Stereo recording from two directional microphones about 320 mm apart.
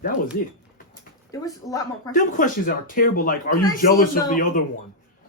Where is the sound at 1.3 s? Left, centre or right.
Centre.